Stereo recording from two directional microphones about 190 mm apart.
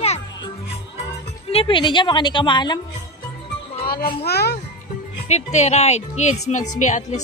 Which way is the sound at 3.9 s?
50° left (ahead or behind).